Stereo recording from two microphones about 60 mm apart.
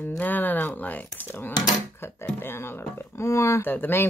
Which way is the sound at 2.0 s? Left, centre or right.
Left.